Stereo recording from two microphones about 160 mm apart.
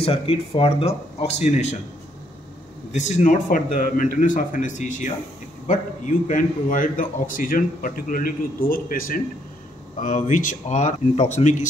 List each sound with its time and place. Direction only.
0.0 s speech: 35° left (ahead or behind)
2.9 s a man's voice: 50° left (ahead or behind)
6.2 s a man's voice: 55° left (ahead or behind)
9.9 s speech: 50° left (ahead or behind)